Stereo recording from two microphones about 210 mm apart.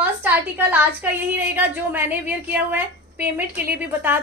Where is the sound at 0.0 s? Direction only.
10° right (ahead or behind).